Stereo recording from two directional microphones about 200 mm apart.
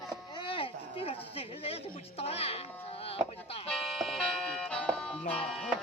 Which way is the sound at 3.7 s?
Centre (ahead or behind).